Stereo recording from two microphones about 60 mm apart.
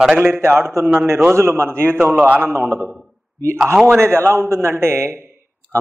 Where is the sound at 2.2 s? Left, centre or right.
Right.